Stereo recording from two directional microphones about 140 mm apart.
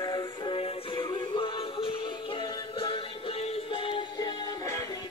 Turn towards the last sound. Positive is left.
turn(degrees=25)  # may be behind; listen again after turning